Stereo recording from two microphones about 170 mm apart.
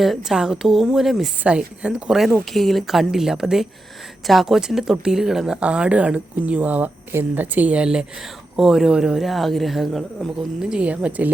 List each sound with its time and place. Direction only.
0.0 s speech: centre (ahead or behind)